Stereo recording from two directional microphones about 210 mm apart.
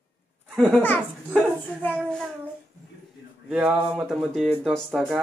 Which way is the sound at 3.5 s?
5° right (ahead or behind).